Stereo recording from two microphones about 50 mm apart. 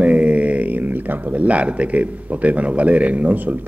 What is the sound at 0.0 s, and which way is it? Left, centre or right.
Speech, right.